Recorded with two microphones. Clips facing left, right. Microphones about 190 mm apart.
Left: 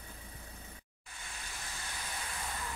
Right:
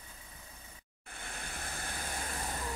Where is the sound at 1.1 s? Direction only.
55° right (ahead or behind).